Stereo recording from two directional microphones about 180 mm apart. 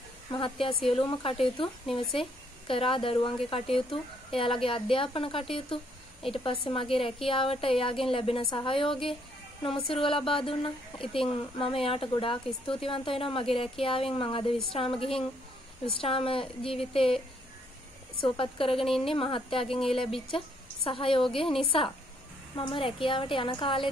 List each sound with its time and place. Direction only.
0.3 s a woman's voice: 30° left (ahead or behind)
18.2 s a woman's voice: 30° left (ahead or behind)